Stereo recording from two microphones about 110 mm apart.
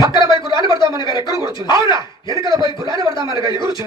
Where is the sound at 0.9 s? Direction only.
45° left (ahead or behind).